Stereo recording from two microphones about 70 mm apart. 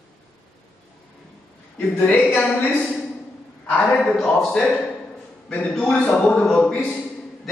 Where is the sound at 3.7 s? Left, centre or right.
Left.